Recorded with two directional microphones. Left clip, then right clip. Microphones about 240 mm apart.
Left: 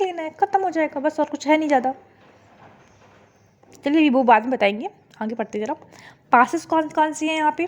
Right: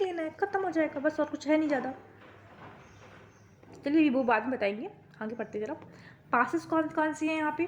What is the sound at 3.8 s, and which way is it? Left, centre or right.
A woman's voice, left.